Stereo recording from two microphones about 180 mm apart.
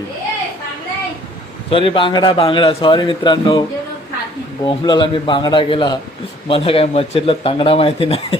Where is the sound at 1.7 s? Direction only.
30° left (ahead or behind).